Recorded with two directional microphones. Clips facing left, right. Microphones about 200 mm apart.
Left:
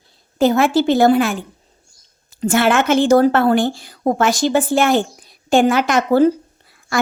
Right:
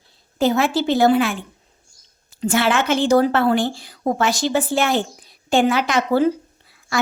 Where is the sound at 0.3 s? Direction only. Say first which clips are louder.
Left 4 dB; 50° left (ahead or behind).